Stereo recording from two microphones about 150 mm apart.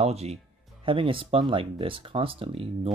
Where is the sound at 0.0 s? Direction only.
45° right (ahead or behind).